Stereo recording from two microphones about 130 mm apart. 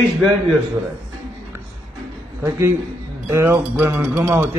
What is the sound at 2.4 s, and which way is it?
A man's voice, 20° right (ahead or behind).